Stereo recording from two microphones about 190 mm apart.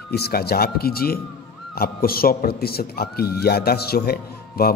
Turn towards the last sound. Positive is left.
turn(degrees=55)  # may be behind; listen again after turning